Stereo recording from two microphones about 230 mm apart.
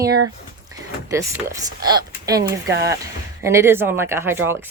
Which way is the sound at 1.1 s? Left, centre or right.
Centre.